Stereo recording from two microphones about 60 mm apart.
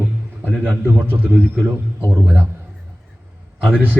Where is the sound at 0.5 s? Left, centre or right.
Centre.